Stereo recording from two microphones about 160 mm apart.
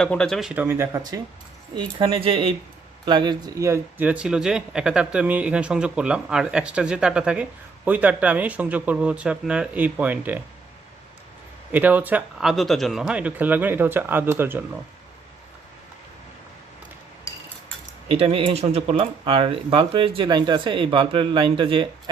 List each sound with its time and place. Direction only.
0.0 s speech: 5° left (ahead or behind); by 1.2 s 20° right (ahead or behind)
1.8 s speech: 30° right (ahead or behind); by 10.4 s 10° right (ahead or behind)
11.7 s speech: 10° right (ahead or behind)
18.1 s speech: 35° right (ahead or behind)